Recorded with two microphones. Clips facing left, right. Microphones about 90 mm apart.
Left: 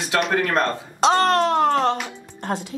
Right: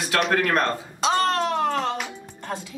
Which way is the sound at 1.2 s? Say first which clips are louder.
Left 4 dB; 55° left (ahead or behind).